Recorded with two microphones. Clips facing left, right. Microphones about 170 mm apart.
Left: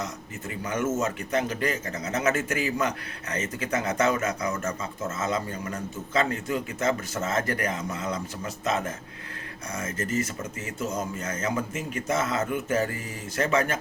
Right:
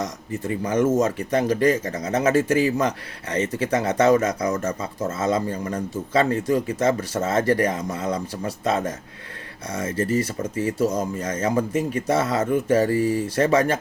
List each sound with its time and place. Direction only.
0.4 s speech: 30° right (ahead or behind)